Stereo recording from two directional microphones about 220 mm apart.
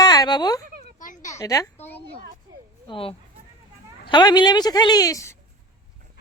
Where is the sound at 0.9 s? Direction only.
35° left (ahead or behind).